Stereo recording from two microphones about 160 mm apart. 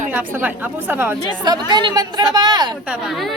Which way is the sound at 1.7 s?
25° right (ahead or behind).